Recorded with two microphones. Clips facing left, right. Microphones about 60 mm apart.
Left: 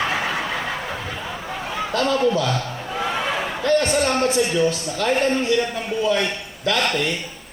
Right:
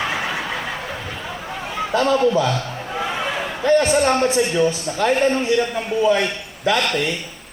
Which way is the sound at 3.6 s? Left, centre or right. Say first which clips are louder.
Right 4 dB; centre.